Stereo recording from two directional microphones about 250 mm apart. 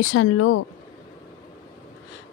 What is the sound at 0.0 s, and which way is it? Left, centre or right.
Speech, left.